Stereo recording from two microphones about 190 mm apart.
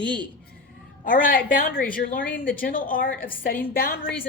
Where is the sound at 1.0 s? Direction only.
45° left (ahead or behind).